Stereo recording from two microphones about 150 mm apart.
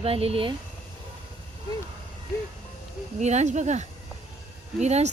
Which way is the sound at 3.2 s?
50° right (ahead or behind).